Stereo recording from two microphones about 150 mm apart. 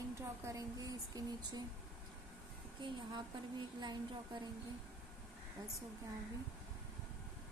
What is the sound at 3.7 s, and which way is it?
Speech, 30° right (ahead or behind).